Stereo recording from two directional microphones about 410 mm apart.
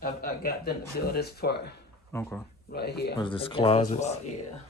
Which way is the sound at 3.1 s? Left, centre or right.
Centre.